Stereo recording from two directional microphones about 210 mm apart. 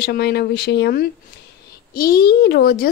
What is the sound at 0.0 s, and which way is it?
A woman's voice, 50° left (ahead or behind).